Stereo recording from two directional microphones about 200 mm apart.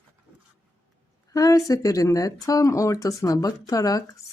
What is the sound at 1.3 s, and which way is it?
Speech, 15° left (ahead or behind).